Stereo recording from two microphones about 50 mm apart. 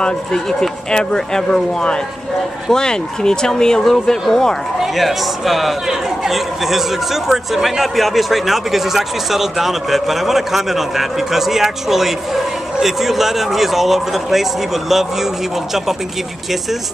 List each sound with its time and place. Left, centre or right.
0.0 s speech: centre
4.7 s a man's voice: centre